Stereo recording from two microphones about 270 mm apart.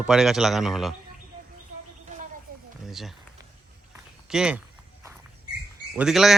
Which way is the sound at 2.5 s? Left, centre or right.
Right.